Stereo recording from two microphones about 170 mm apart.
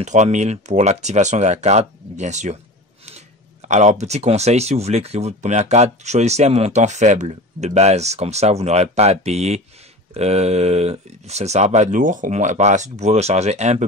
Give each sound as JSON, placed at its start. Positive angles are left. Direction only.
{"t": 0.0, "sound": "speech", "side_deg": -45}